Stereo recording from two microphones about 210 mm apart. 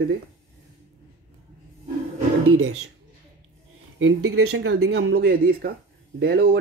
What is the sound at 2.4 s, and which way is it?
Speech, 85° right.